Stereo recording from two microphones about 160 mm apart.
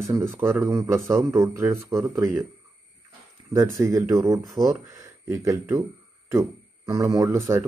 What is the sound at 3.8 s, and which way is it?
Speech, 20° right (ahead or behind).